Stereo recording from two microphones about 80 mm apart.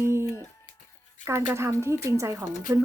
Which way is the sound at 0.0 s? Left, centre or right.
Right.